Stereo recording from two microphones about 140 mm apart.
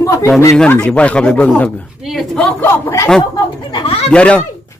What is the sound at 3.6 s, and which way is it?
Speech, 30° left (ahead or behind).